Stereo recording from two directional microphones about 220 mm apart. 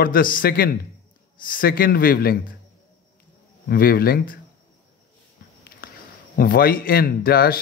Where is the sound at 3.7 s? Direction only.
45° left (ahead or behind).